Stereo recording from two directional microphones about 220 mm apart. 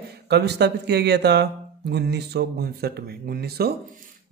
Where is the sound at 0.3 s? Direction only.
50° right (ahead or behind).